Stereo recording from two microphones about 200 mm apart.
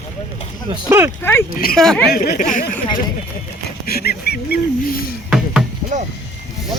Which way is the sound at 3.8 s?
50° left (ahead or behind).